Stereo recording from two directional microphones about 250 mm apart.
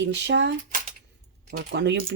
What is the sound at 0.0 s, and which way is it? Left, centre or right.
Speech, right.